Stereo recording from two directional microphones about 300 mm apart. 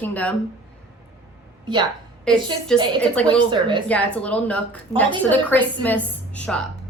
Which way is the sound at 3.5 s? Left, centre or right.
Centre.